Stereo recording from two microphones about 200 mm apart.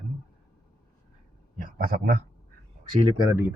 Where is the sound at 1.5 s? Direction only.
45° right (ahead or behind).